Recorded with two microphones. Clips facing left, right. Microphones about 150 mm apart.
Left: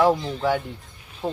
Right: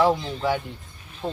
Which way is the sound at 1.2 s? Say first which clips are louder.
Left 2 dB; 10° left (ahead or behind).